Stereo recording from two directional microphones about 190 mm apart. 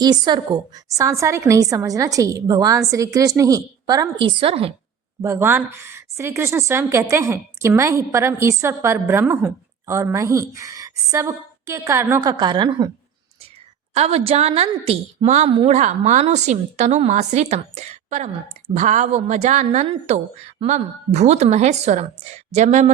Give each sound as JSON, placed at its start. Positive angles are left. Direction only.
{"t": 0.0, "sound": "a woman's voice", "side_deg": -20}
{"t": 5.2, "sound": "a woman's voice", "side_deg": -15}
{"t": 13.9, "sound": "a woman's voice", "side_deg": -35}